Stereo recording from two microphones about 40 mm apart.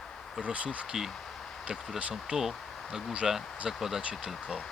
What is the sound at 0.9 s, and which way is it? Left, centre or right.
Speech, centre.